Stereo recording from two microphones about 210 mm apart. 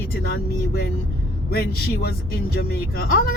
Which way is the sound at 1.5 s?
50° left (ahead or behind).